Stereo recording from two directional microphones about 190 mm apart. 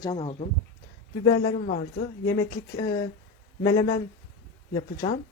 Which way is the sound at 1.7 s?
50° left (ahead or behind).